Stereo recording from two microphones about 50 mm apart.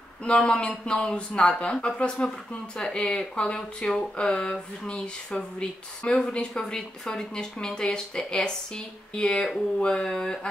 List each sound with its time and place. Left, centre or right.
0.2 s speech: centre